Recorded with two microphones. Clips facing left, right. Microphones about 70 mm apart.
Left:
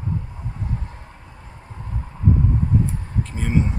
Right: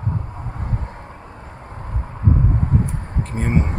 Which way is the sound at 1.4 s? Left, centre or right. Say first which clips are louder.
Right 5 dB; right.